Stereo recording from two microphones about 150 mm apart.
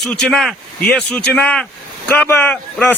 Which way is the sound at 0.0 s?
5° left (ahead or behind).